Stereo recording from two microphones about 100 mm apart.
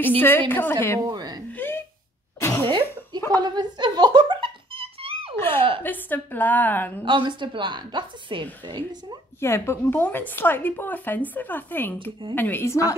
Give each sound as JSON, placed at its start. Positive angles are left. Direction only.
{"t": 0.2, "sound": "a woman's voice", "side_deg": 20}
{"t": 1.0, "sound": "a sound", "side_deg": -40}
{"t": 1.6, "sound": "a sound", "side_deg": 20}
{"t": 2.4, "sound": "cough", "side_deg": 25}
{"t": 3.3, "sound": "music", "side_deg": -45}
{"t": 5.3, "sound": "a woman's voice", "side_deg": 20}
{"t": 7.1, "sound": "a woman's voice", "side_deg": -55}
{"t": 9.4, "sound": "a woman's voice", "side_deg": 25}